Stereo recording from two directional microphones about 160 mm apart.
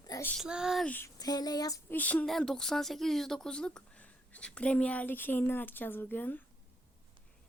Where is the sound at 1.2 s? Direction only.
25° left (ahead or behind).